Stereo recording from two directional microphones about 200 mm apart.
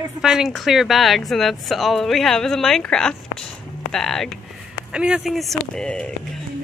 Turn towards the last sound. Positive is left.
turn(degrees=5)  # may be behind; listen again after turning